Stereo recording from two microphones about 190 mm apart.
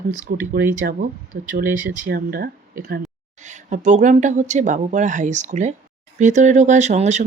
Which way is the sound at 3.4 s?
40° right (ahead or behind).